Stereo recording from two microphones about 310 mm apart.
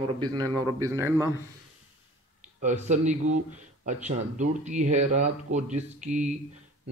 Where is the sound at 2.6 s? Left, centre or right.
Right.